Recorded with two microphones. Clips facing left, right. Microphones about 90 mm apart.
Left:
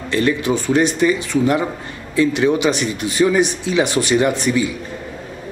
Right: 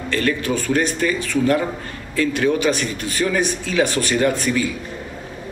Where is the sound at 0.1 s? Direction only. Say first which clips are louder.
Left 3 dB; 20° left (ahead or behind).